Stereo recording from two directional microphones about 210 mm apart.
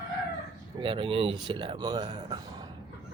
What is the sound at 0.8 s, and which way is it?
Speech, 25° right (ahead or behind).